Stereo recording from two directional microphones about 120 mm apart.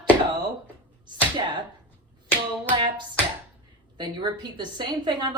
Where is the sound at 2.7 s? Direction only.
40° right (ahead or behind).